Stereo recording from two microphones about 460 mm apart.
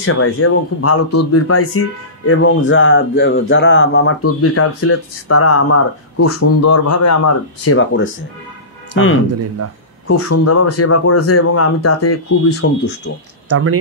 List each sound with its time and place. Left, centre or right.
0.0 s speech: left
13.5 s speech: right